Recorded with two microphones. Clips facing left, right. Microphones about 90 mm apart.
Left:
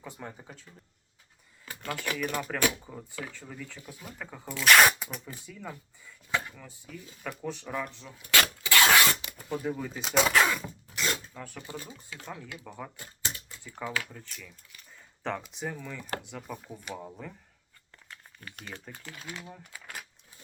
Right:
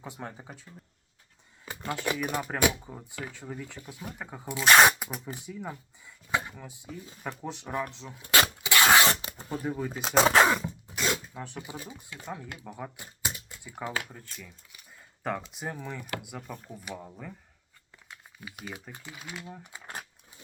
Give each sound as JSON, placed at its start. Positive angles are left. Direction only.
{"t": 0.0, "sound": "speech", "side_deg": -20}
{"t": 4.6, "sound": "speech", "side_deg": -30}
{"t": 5.1, "sound": "speech", "side_deg": -20}
{"t": 7.9, "sound": "a sound", "side_deg": -25}
{"t": 9.6, "sound": "speech", "side_deg": -20}
{"t": 10.1, "sound": "zipper", "side_deg": -30}
{"t": 10.9, "sound": "filing", "side_deg": -5}
{"t": 11.3, "sound": "speech", "side_deg": -20}
{"t": 16.5, "sound": "speech", "side_deg": 5}
{"t": 18.1, "sound": "speech", "side_deg": -10}
{"t": 19.5, "sound": "crumpling", "side_deg": -20}